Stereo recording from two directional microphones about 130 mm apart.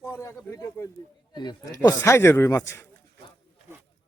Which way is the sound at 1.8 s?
20° left (ahead or behind).